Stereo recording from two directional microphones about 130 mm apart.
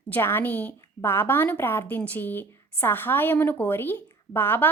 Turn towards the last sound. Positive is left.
turn(degrees=15)  # may be behind; listen again after turning